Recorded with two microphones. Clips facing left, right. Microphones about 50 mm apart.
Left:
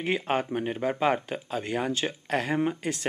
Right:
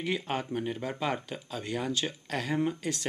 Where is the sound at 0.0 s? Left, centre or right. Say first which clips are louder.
Left 5 dB; left.